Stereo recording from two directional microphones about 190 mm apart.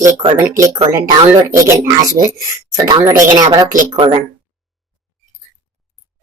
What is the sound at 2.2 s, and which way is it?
Speech, 15° right (ahead or behind).